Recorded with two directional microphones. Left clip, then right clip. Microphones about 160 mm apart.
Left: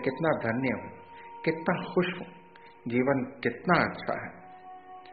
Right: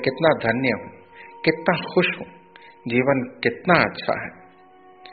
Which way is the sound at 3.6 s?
20° right (ahead or behind).